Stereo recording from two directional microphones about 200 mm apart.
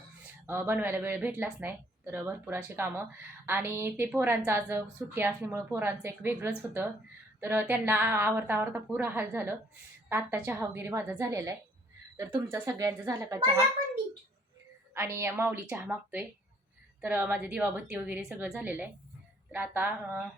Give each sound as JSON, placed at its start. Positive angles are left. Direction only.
{"t": 0.4, "sound": "speech", "side_deg": -10}
{"t": 14.9, "sound": "speech", "side_deg": -10}